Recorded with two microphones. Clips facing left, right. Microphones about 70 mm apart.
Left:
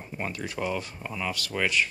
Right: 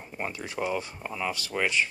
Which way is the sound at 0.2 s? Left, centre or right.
Right.